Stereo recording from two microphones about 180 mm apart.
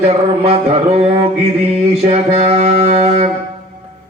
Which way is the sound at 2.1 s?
35° right (ahead or behind).